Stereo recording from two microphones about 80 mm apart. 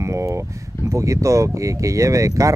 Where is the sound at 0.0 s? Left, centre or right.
Right.